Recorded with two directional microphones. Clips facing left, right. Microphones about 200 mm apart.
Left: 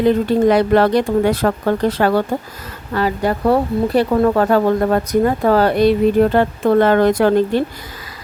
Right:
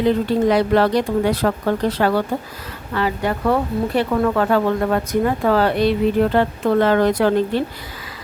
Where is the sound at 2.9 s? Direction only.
40° left (ahead or behind).